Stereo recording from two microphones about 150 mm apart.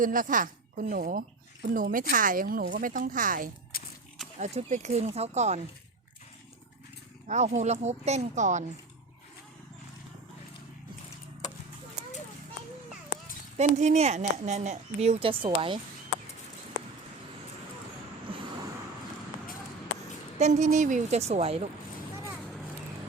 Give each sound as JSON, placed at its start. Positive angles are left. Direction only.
{"t": 0.0, "sound": "speech", "side_deg": -65}
{"t": 3.7, "sound": "a sound", "side_deg": 85}
{"t": 4.4, "sound": "speech", "side_deg": -50}
{"t": 7.3, "sound": "speech", "side_deg": -50}
{"t": 13.6, "sound": "speech", "side_deg": -50}
{"t": 18.3, "sound": "vehicle", "side_deg": -35}
{"t": 20.4, "sound": "speech", "side_deg": -50}